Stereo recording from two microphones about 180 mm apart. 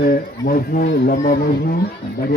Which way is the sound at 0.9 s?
70° left (ahead or behind).